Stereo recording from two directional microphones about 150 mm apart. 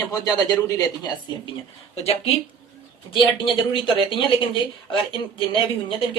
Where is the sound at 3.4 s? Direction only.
35° left (ahead or behind).